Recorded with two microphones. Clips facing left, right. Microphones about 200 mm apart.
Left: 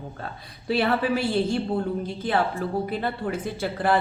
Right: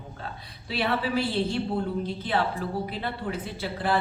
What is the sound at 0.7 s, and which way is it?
Speech, 50° left (ahead or behind).